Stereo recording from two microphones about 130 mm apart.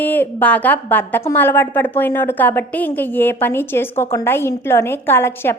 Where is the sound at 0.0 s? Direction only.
15° left (ahead or behind).